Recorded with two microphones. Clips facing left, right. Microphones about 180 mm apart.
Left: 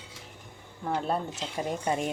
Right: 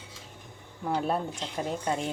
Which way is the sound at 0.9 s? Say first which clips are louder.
Right 1 dB; 5° right (ahead or behind).